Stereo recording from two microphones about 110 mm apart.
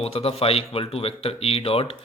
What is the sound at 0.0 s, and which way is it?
Speech, 65° left (ahead or behind).